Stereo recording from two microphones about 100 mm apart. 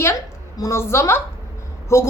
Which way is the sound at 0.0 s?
30° left (ahead or behind).